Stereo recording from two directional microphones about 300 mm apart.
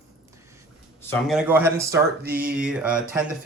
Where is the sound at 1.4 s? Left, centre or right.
Centre.